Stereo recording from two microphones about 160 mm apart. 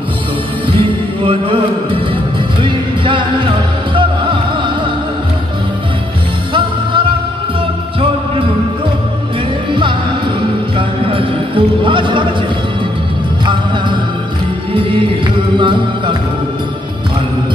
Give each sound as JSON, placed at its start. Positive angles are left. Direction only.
{"t": 0.7, "sound": "music", "side_deg": -35}
{"t": 6.5, "sound": "music", "side_deg": -30}
{"t": 9.7, "sound": "music", "side_deg": -30}
{"t": 14.7, "sound": "music", "side_deg": -35}